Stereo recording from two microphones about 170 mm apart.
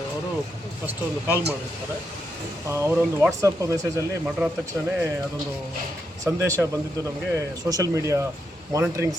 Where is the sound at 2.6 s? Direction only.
15° right (ahead or behind).